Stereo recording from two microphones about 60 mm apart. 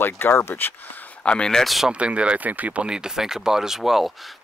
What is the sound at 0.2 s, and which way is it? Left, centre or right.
Speech, left.